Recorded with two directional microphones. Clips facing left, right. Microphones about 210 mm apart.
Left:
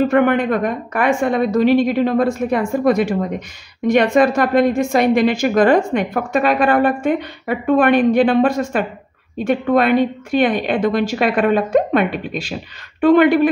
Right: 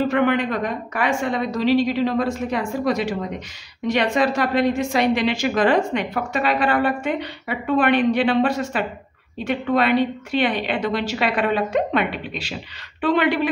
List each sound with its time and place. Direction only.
0.1 s a woman's voice: 50° left (ahead or behind)